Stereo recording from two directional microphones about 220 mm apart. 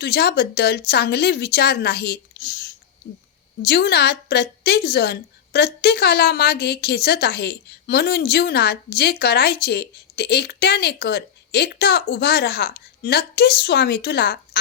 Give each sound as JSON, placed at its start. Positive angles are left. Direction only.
{"t": 0.0, "sound": "a woman's voice", "side_deg": 45}